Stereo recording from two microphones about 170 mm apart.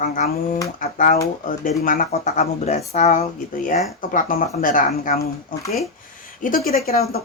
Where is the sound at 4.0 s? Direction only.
55° left (ahead or behind).